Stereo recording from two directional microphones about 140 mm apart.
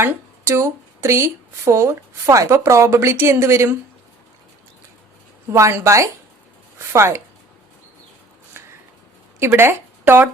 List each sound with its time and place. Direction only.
0.0 s speech: 15° right (ahead or behind)
5.5 s a woman's voice: 20° right (ahead or behind)
8.6 s a sound: 15° right (ahead or behind)
9.4 s speech: 15° right (ahead or behind)